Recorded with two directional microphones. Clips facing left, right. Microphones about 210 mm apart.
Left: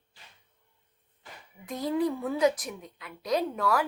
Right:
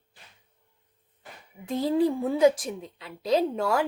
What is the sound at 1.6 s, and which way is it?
Speech, 30° right (ahead or behind).